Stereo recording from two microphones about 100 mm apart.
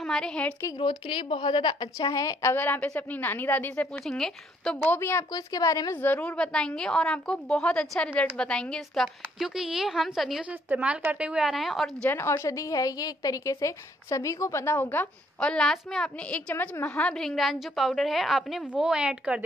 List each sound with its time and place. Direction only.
0.0 s a woman's voice: 5° left (ahead or behind)
0.7 s a woman's voice: 60° left (ahead or behind); by 2.5 s 35° left (ahead or behind)
2.5 s a woman's voice: 15° left (ahead or behind)
4.0 s a woman's voice: 5° left (ahead or behind)
4.9 s speech: 25° left (ahead or behind)
5.3 s a woman's voice: 35° left (ahead or behind)
5.9 s a woman's voice: 15° left (ahead or behind); by 10.4 s centre (ahead or behind)
10.4 s a woman's voice: 15° right (ahead or behind)
11.5 s a woman's voice: centre (ahead or behind)
12.1 s a woman's voice: 25° left (ahead or behind)
15.5 s a woman's voice: 5° left (ahead or behind)
17.0 s a woman's voice: 5° left (ahead or behind); by 19.4 s 10° right (ahead or behind)